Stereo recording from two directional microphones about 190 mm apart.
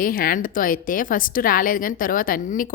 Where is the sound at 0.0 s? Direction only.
50° left (ahead or behind).